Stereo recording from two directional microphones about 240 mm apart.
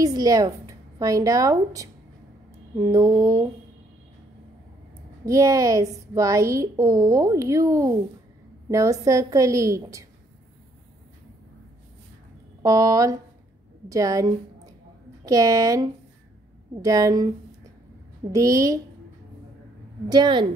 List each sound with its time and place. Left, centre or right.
0.0 s a woman's voice: centre
5.2 s a woman's voice: centre
12.6 s a woman's voice: centre
18.3 s a woman's voice: centre
20.1 s a woman's voice: centre